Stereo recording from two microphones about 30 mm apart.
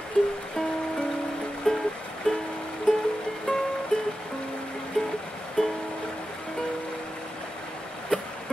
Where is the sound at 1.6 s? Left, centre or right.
Centre.